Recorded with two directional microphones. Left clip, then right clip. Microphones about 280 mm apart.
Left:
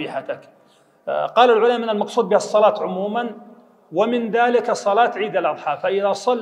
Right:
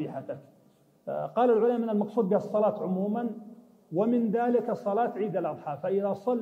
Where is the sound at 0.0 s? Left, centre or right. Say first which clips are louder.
Left 10 dB; centre.